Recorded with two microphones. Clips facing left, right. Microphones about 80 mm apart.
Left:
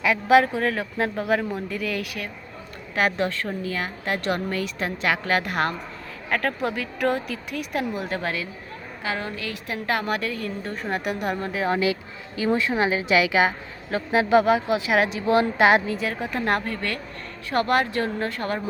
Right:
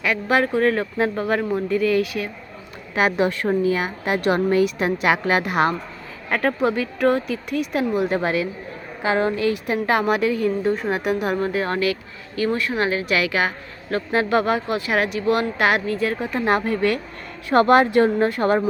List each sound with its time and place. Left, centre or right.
0.0 s speech: centre
2.9 s a woman's voice: centre
8.2 s a woman's voice: right
10.8 s speech: centre
12.4 s speech: centre
16.0 s a woman's voice: centre
16.6 s speech: centre